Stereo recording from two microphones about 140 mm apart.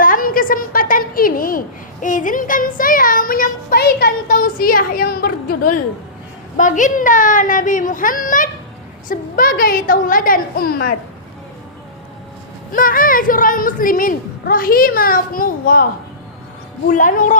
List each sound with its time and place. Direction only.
0.0 s a woman's voice: 85° left
6.6 s a child's voice: 65° left (ahead or behind)
9.0 s a woman's voice: 90° left
12.7 s a woman's voice: 80° left
16.9 s a child's voice: 65° left (ahead or behind)